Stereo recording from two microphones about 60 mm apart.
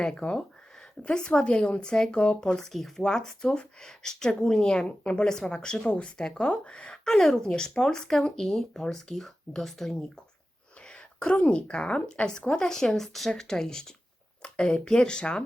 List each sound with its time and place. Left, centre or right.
0.0 s speech: centre
14.4 s a sound: centre
14.7 s speech: centre